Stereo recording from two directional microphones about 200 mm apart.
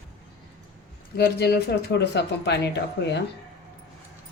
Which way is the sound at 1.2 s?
55° left (ahead or behind).